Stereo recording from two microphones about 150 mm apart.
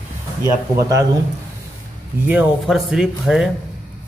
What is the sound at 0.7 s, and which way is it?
Speech, 20° right (ahead or behind).